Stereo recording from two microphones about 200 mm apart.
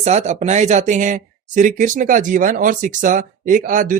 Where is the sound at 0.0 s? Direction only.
35° right (ahead or behind).